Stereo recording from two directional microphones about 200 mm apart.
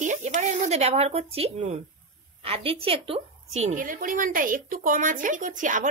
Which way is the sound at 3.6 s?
40° right (ahead or behind).